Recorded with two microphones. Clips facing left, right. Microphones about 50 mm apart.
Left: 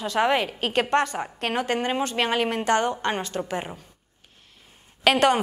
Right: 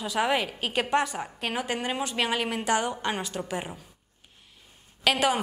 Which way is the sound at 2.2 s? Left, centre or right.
Centre.